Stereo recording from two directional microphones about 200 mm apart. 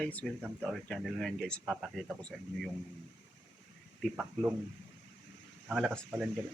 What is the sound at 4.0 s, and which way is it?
Speech, 5° right (ahead or behind).